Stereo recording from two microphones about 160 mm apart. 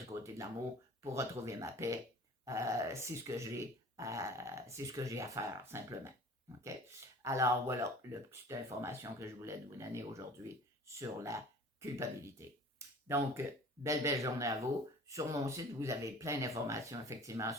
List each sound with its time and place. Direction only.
0.0 s a sound: 20° right (ahead or behind)
1.0 s speech: 20° right (ahead or behind)
7.2 s speech: 20° right (ahead or behind)